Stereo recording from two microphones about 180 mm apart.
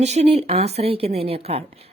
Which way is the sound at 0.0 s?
35° right (ahead or behind).